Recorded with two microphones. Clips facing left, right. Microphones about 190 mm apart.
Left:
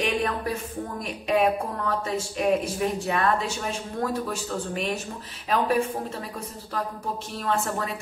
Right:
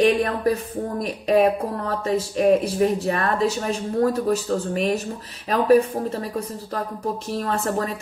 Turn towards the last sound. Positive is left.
turn(degrees=-40)  # may be behind; listen again after turning